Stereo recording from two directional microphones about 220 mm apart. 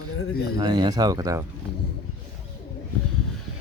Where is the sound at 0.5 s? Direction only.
15° right (ahead or behind).